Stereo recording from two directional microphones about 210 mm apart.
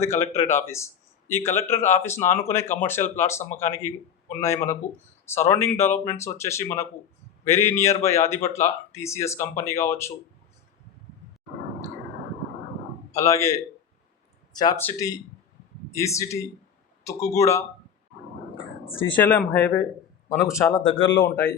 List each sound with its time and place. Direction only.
0.0 s speech: 15° left (ahead or behind)
13.1 s speech: 15° left (ahead or behind)
19.1 s speech: 5° left (ahead or behind); by 21.1 s 25° left (ahead or behind)